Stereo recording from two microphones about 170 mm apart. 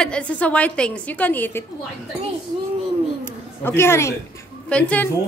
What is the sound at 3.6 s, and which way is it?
A woman's voice, 15° left (ahead or behind).